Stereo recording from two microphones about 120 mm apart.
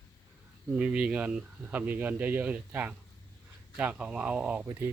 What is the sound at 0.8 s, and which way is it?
Speech, 10° right (ahead or behind).